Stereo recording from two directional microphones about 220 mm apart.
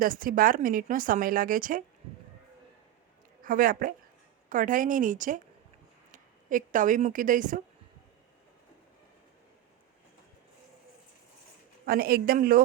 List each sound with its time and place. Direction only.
0.0 s speech: 40° right (ahead or behind)
3.4 s speech: 40° right (ahead or behind)
11.9 s speech: 45° right (ahead or behind)